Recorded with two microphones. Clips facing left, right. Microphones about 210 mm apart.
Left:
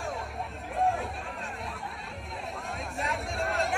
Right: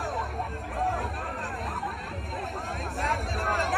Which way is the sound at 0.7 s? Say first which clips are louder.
Left 3 dB; centre (ahead or behind).